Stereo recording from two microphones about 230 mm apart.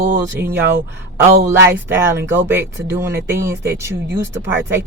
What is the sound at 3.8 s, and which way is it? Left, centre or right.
Speech, centre.